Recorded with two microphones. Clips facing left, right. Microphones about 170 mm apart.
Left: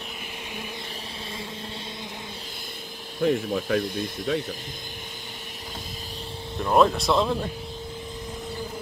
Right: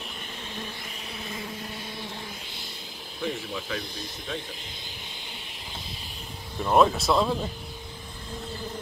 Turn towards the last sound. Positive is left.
turn(degrees=0)  # may be behind; listen again after turning